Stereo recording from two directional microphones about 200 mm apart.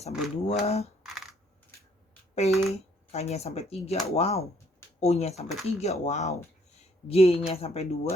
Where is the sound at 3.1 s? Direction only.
30° left (ahead or behind).